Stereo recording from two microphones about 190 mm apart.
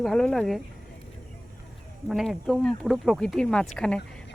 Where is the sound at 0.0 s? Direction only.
Centre (ahead or behind).